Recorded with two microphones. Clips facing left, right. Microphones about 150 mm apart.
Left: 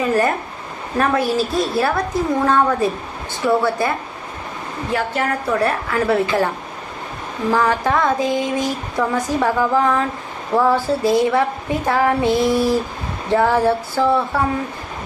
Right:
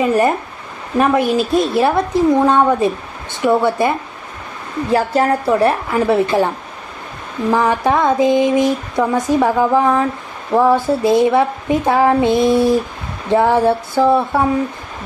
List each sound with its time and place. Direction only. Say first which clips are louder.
0.1 s female singing: right 3 dB; 20° right (ahead or behind)
4.9 s female singing: right 6 dB; 35° right (ahead or behind)
7.5 s female singing: right 3 dB; 20° right (ahead or behind)